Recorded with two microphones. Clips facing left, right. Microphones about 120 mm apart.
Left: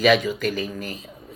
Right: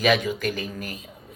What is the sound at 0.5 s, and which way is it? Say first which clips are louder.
Speech: left 3 dB; 40° left (ahead or behind).